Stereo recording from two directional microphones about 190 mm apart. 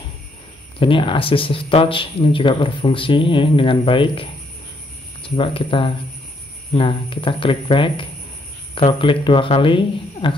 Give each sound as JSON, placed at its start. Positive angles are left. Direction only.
{"t": 0.7, "sound": "speech", "side_deg": 25}